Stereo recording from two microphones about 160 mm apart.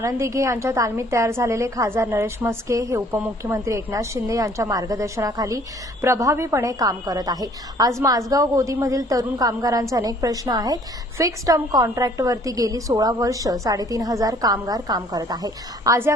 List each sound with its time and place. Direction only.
0.0 s a woman's voice: 20° right (ahead or behind)